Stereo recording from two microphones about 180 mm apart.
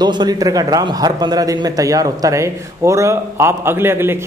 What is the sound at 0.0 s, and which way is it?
A man's voice, 25° right (ahead or behind).